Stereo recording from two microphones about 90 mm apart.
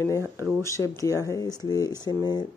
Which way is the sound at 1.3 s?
45° left (ahead or behind).